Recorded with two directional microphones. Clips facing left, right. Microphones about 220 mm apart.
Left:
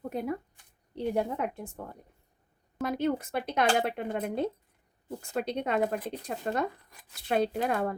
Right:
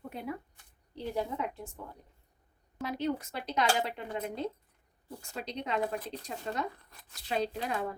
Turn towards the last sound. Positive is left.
turn(degrees=55)  # may be behind; listen again after turning